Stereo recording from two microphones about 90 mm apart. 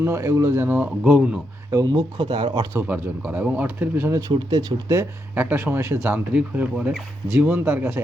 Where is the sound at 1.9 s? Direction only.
70° right (ahead or behind).